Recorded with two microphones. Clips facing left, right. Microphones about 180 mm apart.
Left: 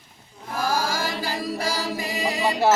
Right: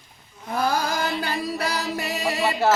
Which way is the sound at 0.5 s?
65° right (ahead or behind).